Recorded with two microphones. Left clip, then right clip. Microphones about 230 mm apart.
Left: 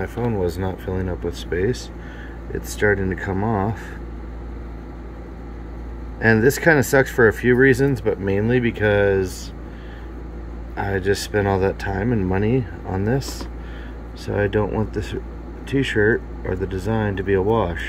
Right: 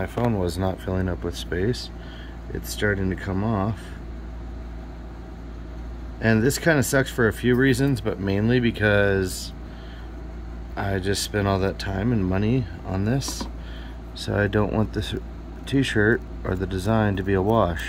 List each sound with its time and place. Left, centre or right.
0.3 s speech: centre
2.9 s speech: centre
6.2 s speech: centre
10.8 s speech: centre
14.3 s speech: centre